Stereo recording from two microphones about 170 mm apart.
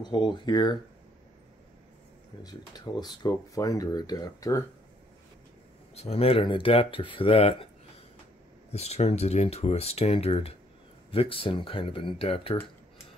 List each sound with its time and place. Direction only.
0.0 s speech: 25° left (ahead or behind)
2.4 s speech: 25° left (ahead or behind)
5.9 s speech: 35° left (ahead or behind)
8.7 s speech: 40° left (ahead or behind)